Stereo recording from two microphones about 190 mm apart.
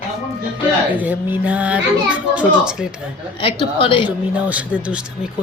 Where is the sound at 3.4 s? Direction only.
30° left (ahead or behind).